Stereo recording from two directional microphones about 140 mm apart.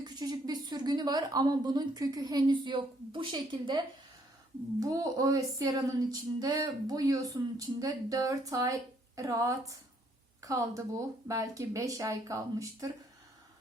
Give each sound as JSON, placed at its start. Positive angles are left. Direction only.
{"t": 0.0, "sound": "speech", "side_deg": -30}